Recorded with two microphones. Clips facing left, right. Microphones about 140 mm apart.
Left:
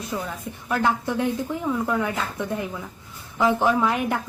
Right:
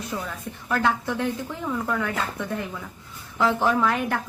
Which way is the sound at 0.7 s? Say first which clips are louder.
Left 1 dB; 15° left (ahead or behind).